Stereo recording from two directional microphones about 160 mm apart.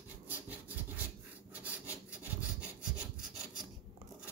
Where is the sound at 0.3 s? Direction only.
15° right (ahead or behind).